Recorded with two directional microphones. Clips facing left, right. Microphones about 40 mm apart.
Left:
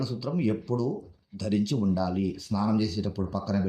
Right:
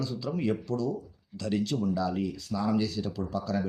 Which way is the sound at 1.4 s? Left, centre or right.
Centre.